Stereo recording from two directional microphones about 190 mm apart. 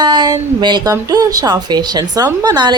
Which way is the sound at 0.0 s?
20° right (ahead or behind).